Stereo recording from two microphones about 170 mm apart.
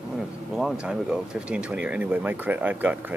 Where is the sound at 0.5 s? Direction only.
5° right (ahead or behind).